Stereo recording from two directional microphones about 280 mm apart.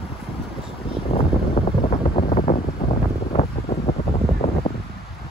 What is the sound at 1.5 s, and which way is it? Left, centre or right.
Wind noise, centre.